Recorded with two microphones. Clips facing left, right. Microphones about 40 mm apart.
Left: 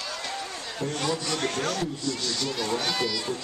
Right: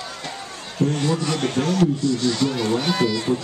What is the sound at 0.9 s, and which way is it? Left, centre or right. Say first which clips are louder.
Speech: right 6 dB; centre.